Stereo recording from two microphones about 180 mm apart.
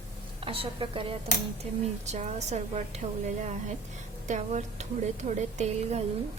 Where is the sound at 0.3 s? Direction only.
30° right (ahead or behind).